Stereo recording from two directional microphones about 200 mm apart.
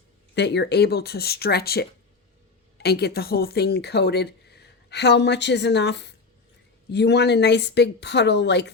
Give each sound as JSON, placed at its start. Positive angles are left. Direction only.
{"t": 0.3, "sound": "a woman's voice", "side_deg": 60}